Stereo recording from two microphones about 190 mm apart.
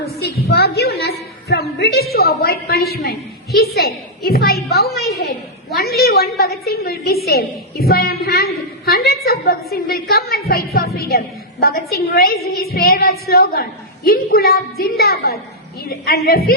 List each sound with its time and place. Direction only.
0.2 s a sound: 60° left (ahead or behind)
1.8 s a woman's voice: 55° left (ahead or behind)
5.7 s a woman's voice: 55° left (ahead or behind)